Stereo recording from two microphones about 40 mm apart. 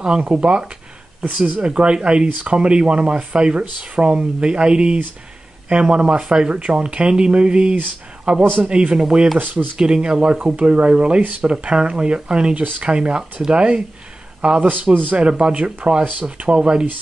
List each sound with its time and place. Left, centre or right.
0.2 s speech: right
1.2 s speech: right
1.6 s speech: right
2.2 s speech: right
2.5 s speech: right
6.5 s speech: right
9.4 s speech: right
9.8 s speech: right
12.5 s speech: right
12.8 s speech: right